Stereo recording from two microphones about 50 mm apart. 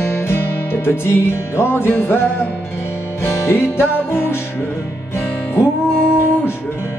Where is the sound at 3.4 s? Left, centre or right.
Left.